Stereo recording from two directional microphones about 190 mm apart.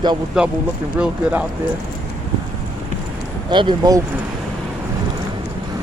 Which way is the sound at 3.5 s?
25° right (ahead or behind).